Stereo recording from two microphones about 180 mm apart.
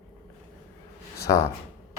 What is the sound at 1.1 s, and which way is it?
Speech, 15° left (ahead or behind).